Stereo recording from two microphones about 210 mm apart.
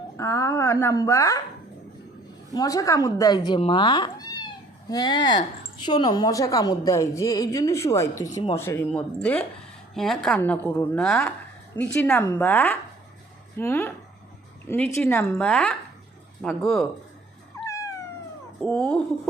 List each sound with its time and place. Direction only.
0.2 s speech: 15° left (ahead or behind)
2.5 s a woman's voice: 15° left (ahead or behind); by 16.8 s centre (ahead or behind)
17.7 s cat: 15° left (ahead or behind)
18.6 s a woman's voice: 5° left (ahead or behind)